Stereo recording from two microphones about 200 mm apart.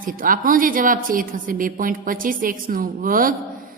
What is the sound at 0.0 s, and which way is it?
A woman's voice, 45° right (ahead or behind).